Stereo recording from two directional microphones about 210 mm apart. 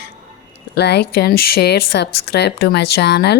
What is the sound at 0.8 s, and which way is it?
Speech, 50° left (ahead or behind).